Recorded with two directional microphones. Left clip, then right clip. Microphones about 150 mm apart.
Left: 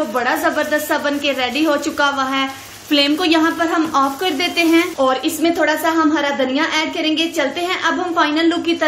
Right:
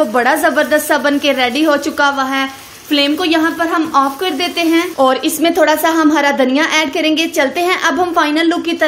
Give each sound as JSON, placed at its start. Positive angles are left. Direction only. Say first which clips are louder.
{"t": 0.1, "sound": "a woman's voice", "louder": "right 5 dB", "side_deg": -40}
{"t": 2.9, "sound": "a woman's voice", "louder": "right 2 dB", "side_deg": -15}
{"t": 4.9, "sound": "a woman's voice", "louder": "right 4 dB", "side_deg": -35}